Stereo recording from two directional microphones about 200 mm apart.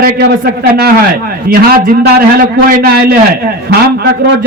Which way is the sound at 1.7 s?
50° right (ahead or behind).